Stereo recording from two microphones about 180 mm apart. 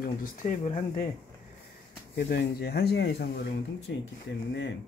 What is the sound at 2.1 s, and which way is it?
Speech, 60° left (ahead or behind).